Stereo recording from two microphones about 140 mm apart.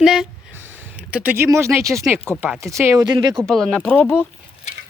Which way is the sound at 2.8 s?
25° right (ahead or behind).